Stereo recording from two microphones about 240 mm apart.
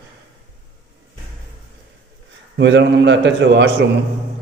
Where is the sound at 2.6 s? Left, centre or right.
Right.